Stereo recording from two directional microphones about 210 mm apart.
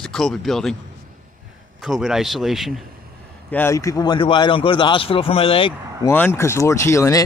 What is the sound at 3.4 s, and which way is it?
A man's voice, 10° left (ahead or behind).